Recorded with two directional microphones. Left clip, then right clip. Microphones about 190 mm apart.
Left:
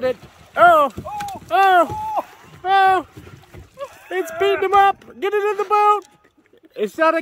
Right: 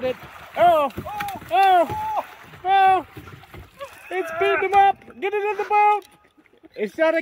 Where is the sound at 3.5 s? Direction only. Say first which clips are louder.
Right 1 dB; 10° left (ahead or behind).